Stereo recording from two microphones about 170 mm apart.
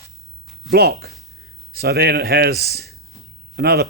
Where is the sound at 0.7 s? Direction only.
70° right (ahead or behind).